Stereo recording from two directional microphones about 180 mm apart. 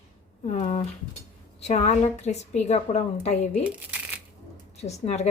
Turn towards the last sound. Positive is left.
turn(degrees=35)  # may be behind; listen again after turning